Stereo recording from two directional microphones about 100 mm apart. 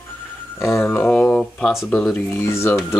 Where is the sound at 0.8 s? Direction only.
15° left (ahead or behind).